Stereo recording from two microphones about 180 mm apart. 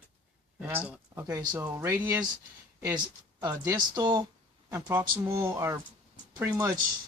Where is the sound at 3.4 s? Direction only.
20° right (ahead or behind).